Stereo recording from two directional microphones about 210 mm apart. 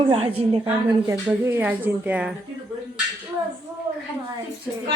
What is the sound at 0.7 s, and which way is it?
A woman's voice, 10° right (ahead or behind).